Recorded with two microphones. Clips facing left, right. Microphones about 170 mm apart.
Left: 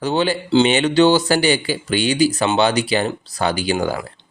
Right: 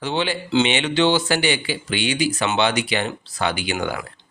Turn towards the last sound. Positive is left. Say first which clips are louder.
# left 5 dB
turn(degrees=35)  # may be behind; listen again after turning